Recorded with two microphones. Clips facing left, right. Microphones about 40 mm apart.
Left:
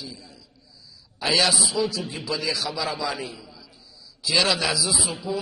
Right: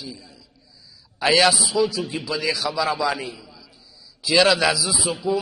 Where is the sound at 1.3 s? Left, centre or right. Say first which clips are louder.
Right 4 dB; centre.